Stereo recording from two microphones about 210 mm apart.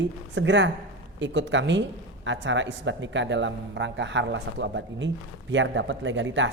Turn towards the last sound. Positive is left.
turn(degrees=-65)  # may be behind; listen again after turning